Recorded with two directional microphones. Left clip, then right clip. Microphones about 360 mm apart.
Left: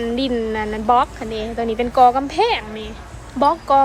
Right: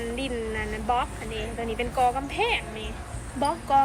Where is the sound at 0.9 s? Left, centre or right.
Centre.